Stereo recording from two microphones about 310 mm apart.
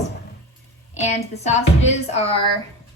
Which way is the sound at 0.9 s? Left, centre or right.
Left.